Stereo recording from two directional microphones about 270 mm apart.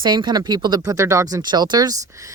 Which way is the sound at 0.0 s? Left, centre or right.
Centre.